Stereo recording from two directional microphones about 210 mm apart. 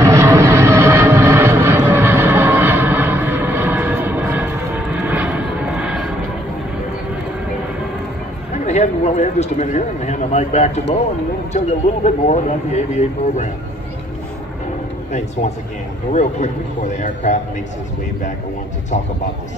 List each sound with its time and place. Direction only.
0.0 s vehicle: 15° right (ahead or behind)
8.6 s speech: 35° left (ahead or behind)
16.1 s speech: 35° left (ahead or behind)